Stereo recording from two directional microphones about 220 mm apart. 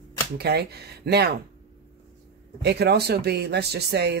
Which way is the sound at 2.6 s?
50° right (ahead or behind).